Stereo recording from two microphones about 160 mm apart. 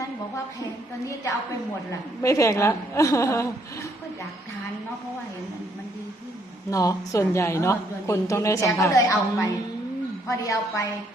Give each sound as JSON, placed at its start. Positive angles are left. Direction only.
{"t": 2.2, "sound": "a woman's voice", "side_deg": 20}
{"t": 6.7, "sound": "a woman's voice", "side_deg": 20}